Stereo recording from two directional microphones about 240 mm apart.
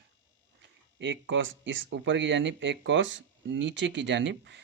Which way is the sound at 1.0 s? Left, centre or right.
Right.